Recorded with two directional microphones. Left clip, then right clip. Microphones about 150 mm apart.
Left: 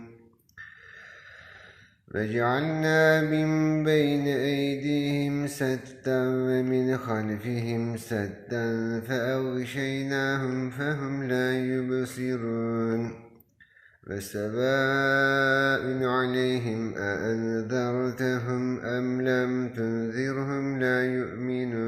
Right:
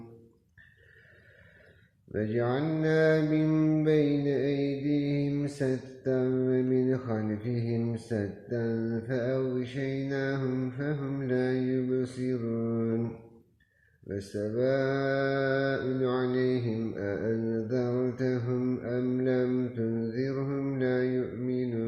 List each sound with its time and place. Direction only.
2.1 s mantra: 20° right (ahead or behind)
14.1 s mantra: 25° right (ahead or behind)